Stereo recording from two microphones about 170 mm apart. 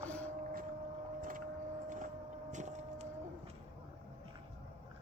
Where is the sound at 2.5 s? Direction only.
45° right (ahead or behind).